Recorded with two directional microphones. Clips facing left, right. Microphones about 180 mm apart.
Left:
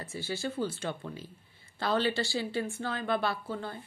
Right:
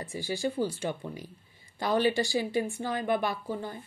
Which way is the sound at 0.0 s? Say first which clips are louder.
Right 4 dB; 15° right (ahead or behind).